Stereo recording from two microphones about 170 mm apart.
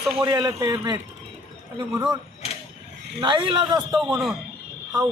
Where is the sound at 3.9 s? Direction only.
5° right (ahead or behind).